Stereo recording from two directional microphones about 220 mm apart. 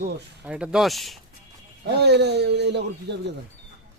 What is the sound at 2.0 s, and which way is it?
Speech, 50° right (ahead or behind).